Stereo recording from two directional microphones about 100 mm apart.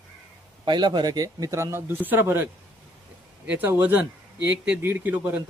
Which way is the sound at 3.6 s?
15° right (ahead or behind).